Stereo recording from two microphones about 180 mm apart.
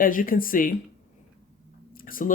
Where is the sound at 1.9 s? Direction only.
50° left (ahead or behind).